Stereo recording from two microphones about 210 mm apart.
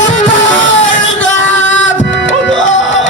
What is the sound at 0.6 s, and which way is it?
Music, 65° left (ahead or behind).